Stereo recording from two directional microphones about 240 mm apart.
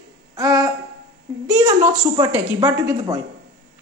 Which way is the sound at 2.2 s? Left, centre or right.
Centre.